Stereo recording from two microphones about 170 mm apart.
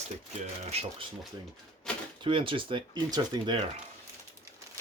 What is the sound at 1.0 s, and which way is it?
Speech, 30° right (ahead or behind).